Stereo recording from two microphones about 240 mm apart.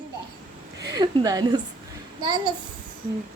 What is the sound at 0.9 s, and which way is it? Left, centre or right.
A woman's voice, centre.